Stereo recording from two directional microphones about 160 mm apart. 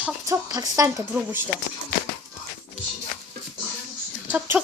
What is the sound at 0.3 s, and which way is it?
Speech, 20° right (ahead or behind).